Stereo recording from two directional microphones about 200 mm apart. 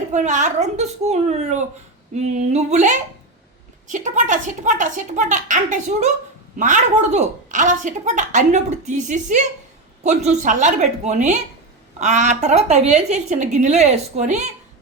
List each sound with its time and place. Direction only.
0.1 s a woman's voice: 35° right (ahead or behind)